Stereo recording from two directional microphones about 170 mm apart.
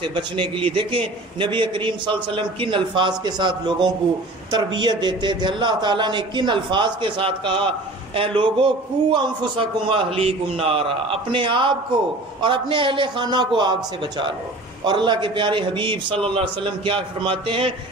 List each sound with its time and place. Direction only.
0.0 s a man's voice: 30° right (ahead or behind)